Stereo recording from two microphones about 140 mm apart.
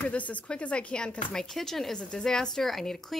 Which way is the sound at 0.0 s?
10° left (ahead or behind).